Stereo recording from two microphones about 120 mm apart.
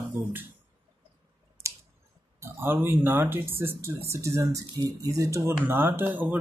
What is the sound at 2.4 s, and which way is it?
Speech, 20° right (ahead or behind).